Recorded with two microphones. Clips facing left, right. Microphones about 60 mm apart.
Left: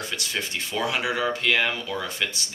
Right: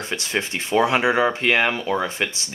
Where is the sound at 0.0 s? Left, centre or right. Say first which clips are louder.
Right 5 dB; right.